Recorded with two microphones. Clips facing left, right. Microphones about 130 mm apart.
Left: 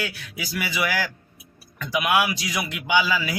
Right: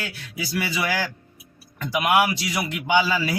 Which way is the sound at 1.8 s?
25° right (ahead or behind).